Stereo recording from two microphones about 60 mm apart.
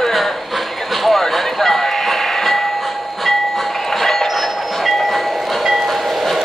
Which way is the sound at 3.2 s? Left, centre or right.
Centre.